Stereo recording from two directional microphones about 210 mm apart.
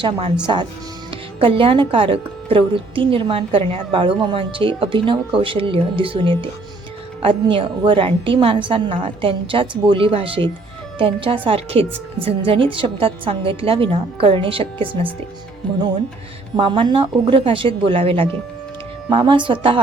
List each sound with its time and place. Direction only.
0.0 s a woman's voice: 25° right (ahead or behind)
15.6 s speech: 5° left (ahead or behind)
16.6 s a woman's voice: 25° right (ahead or behind)